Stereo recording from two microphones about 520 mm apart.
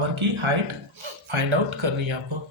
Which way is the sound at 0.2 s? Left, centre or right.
Right.